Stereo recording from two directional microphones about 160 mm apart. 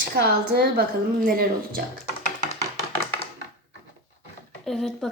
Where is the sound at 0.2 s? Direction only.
75° right (ahead or behind).